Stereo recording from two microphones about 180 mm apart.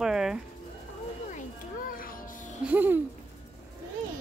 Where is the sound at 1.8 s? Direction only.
50° left (ahead or behind).